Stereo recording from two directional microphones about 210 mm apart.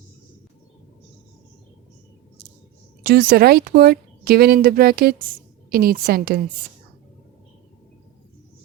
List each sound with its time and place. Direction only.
3.0 s speech: 45° right (ahead or behind)